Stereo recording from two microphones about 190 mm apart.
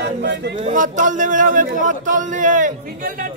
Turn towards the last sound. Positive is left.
turn(degrees=-45)  # may be behind; listen again after turning